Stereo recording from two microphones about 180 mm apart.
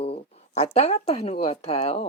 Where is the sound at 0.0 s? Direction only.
35° left (ahead or behind).